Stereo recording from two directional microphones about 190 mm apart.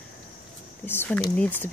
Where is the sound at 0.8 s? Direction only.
10° left (ahead or behind).